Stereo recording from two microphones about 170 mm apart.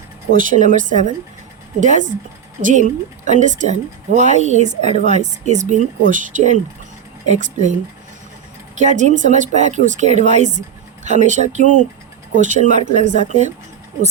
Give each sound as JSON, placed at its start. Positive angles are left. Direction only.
{"t": 0.3, "sound": "speech", "side_deg": -45}
{"t": 8.8, "sound": "speech", "side_deg": -45}